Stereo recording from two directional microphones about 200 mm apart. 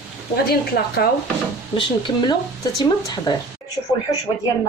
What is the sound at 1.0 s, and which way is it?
Chopping, 55° left (ahead or behind).